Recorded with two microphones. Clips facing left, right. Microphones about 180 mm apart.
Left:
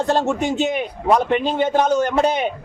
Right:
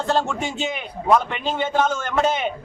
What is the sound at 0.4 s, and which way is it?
Speech, 45° left (ahead or behind).